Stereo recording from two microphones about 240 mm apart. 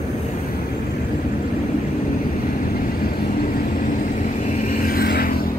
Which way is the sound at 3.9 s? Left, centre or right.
Left.